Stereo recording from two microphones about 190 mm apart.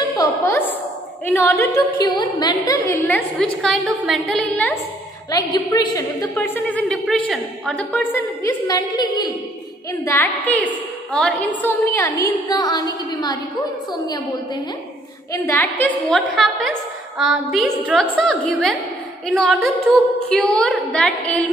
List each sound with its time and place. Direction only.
0.2 s music: 15° left (ahead or behind)
1.6 s a sound: 15° left (ahead or behind)
2.7 s a woman's voice: 15° left (ahead or behind)
5.3 s a woman's voice: 20° left (ahead or behind); by 8.2 s 5° left (ahead or behind)
8.5 s a sound: 20° left (ahead or behind)
10.0 s a woman's voice: 10° left (ahead or behind)
13.9 s a sound: 20° left (ahead or behind)
15.3 s a woman's voice: 15° left (ahead or behind)
16.1 s a woman's voice: centre (ahead or behind)